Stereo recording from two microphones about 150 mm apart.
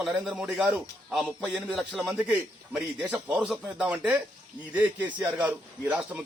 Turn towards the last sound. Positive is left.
turn(degrees=-10)  # may be behind; listen again after turning